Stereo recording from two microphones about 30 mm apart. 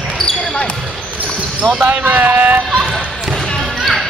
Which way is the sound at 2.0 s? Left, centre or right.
Right.